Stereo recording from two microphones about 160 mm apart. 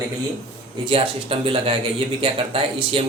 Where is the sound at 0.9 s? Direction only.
35° right (ahead or behind).